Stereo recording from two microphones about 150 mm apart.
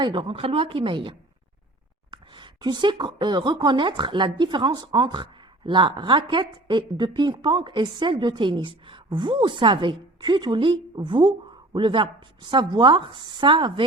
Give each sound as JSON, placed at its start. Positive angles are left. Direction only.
{"t": 0.0, "sound": "speech", "side_deg": -35}